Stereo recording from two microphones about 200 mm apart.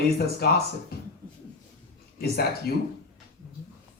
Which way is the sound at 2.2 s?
50° left (ahead or behind).